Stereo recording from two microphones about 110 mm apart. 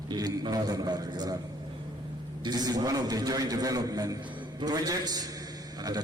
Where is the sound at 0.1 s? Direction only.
40° right (ahead or behind).